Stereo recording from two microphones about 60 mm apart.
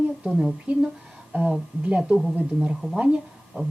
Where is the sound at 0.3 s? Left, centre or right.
Centre.